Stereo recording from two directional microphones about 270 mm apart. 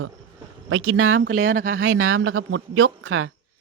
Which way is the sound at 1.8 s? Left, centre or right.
Right.